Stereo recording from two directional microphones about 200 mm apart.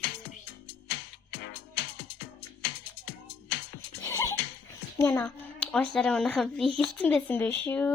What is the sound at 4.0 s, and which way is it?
Music, 15° left (ahead or behind).